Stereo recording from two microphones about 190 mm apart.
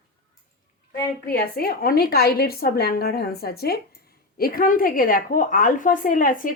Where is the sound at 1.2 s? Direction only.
55° left (ahead or behind).